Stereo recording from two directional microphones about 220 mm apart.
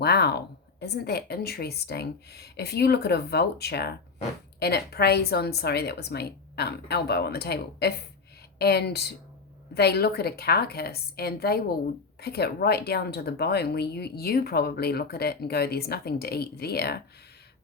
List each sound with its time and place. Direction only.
0.0 s speech: 50° left (ahead or behind)